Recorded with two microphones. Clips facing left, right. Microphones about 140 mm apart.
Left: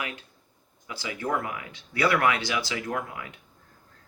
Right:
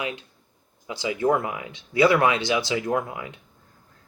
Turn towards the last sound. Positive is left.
turn(degrees=-25)  # may be behind; listen again after turning